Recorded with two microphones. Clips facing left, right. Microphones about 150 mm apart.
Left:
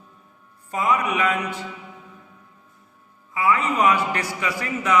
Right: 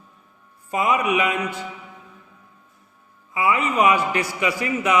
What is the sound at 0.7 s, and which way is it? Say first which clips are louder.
Speech: right 2 dB; 15° right (ahead or behind).